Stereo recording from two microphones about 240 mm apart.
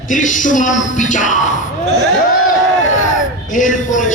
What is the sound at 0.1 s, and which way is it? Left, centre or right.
Speech, left.